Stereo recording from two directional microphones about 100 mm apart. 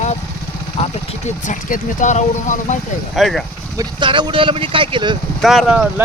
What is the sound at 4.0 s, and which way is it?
Speech, 50° right (ahead or behind).